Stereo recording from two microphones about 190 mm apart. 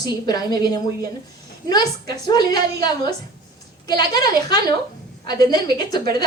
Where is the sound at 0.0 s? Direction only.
20° left (ahead or behind).